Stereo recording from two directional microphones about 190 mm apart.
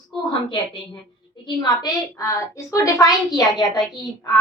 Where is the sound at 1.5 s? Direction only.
20° left (ahead or behind).